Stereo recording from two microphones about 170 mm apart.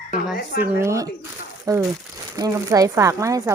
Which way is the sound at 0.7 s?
15° right (ahead or behind).